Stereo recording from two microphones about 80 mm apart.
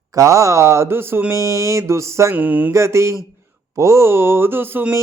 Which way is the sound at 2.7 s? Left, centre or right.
Right.